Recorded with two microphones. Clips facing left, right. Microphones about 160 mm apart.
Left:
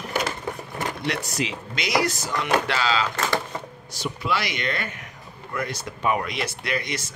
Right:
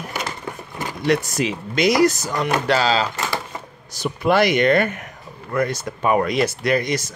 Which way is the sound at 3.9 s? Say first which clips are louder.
Right 9 dB; 50° right (ahead or behind).